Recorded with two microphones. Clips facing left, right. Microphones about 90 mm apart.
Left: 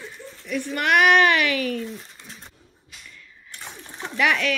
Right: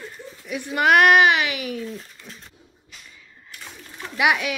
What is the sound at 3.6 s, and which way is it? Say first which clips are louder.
Splash: left 2 dB; 25° left (ahead or behind).